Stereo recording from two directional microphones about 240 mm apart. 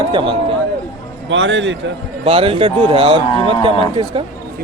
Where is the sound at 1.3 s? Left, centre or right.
Right.